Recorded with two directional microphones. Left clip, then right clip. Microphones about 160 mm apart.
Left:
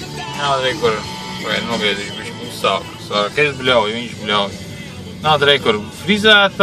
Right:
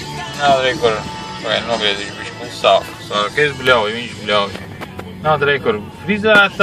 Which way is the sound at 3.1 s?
15° left (ahead or behind).